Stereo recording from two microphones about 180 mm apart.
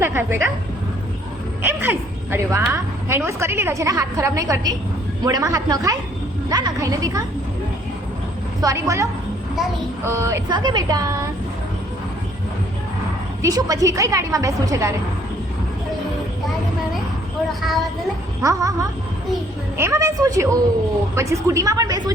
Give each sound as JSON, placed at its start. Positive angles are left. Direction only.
{"t": 0.0, "sound": "a woman's voice", "side_deg": -15}
{"t": 1.6, "sound": "a woman's voice", "side_deg": -10}
{"t": 8.6, "sound": "a woman's voice", "side_deg": -15}
{"t": 13.4, "sound": "a woman's voice", "side_deg": -20}
{"t": 18.4, "sound": "a woman's voice", "side_deg": -20}